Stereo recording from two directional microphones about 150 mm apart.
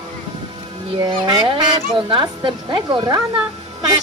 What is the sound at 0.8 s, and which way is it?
Speech, 30° right (ahead or behind).